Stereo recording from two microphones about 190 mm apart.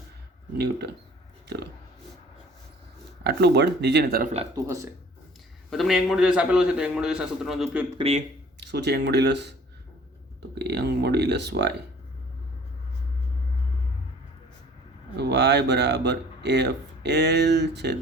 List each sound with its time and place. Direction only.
0.5 s speech: 60° right (ahead or behind)
3.2 s speech: 60° right (ahead or behind)
4.5 s speech: 15° right (ahead or behind)
5.7 s a man's voice: centre (ahead or behind)
7.9 s speech: 30° right (ahead or behind)
8.6 s speech: 60° right (ahead or behind)
15.1 s speech: 60° right (ahead or behind)